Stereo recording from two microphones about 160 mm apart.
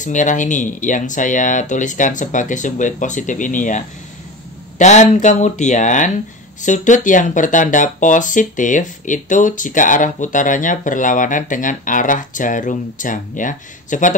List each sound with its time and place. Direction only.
0.0 s speech: 50° left (ahead or behind)